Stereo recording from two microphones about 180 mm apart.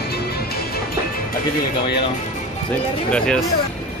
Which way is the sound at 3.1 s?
5° left (ahead or behind).